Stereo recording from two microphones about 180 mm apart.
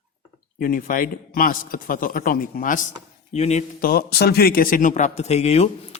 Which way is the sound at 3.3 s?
35° left (ahead or behind).